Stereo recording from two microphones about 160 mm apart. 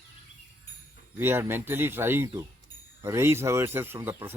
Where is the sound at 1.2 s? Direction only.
15° right (ahead or behind).